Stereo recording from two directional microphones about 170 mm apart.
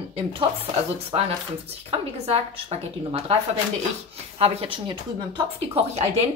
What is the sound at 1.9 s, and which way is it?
Speech, 35° right (ahead or behind).